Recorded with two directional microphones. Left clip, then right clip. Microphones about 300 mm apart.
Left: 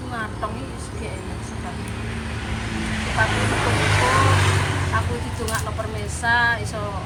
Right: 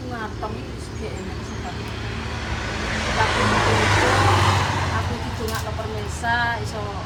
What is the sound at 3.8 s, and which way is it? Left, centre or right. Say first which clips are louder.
Vehicle: right 2 dB; right.